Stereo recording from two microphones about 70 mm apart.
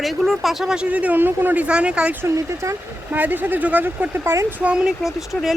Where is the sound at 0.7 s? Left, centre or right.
Centre.